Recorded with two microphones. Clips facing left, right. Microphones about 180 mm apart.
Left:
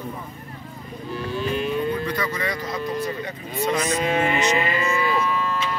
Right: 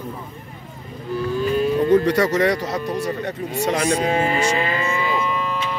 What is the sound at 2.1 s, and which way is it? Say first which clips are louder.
Speech: right 9 dB; 80° right.